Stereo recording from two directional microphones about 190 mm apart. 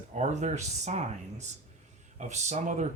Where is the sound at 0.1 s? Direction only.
40° right (ahead or behind).